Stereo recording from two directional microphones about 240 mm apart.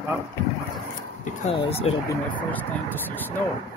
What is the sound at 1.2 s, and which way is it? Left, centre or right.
Speech, left.